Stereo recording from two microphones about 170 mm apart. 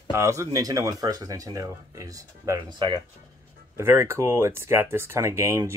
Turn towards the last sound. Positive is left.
turn(degrees=-15)  # may be behind; listen again after turning